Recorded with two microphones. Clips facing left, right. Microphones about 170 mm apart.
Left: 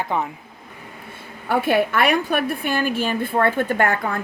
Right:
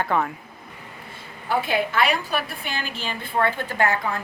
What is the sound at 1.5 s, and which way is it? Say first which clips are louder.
A woman's voice: left 4 dB; 55° left (ahead or behind).